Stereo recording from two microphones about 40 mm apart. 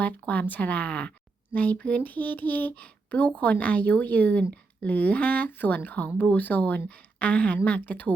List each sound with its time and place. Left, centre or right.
0.0 s speech: left